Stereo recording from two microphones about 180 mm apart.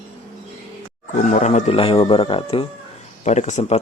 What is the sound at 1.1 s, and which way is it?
Speech, 40° left (ahead or behind).